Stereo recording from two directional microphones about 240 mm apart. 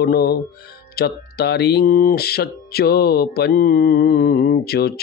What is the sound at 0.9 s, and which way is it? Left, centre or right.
Speech, left.